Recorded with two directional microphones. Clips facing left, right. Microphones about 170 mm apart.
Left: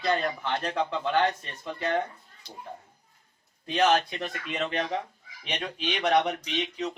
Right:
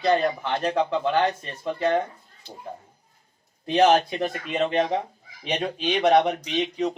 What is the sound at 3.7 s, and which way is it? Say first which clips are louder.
Speech: right 5 dB; 40° right (ahead or behind).